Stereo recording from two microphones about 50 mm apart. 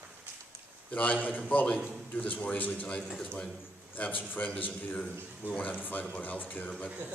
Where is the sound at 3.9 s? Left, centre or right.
Left.